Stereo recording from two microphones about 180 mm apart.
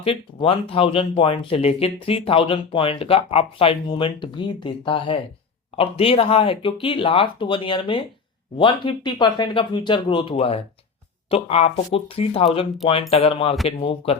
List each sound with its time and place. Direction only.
0.0 s speech: 30° left (ahead or behind)